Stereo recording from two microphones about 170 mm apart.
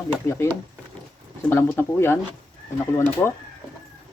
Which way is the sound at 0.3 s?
15° left (ahead or behind).